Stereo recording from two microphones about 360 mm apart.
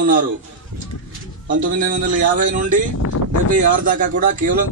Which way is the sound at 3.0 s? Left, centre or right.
Left.